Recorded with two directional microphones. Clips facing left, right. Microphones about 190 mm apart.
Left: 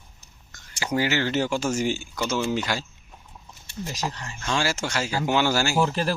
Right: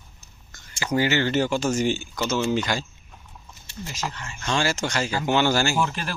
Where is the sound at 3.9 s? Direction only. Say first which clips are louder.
Left 1 dB; 35° left (ahead or behind).